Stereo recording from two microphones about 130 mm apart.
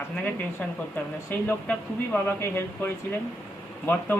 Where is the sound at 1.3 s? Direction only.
15° left (ahead or behind).